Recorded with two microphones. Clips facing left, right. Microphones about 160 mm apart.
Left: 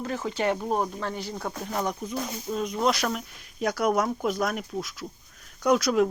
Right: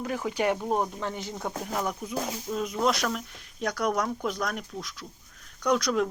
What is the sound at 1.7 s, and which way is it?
Speech, centre (ahead or behind).